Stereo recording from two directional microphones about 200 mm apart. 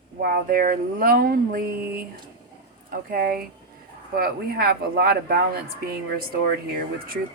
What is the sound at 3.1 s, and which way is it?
Speech, 45° right (ahead or behind).